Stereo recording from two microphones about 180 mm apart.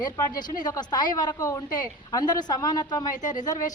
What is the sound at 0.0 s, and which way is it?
A woman's voice, 25° left (ahead or behind).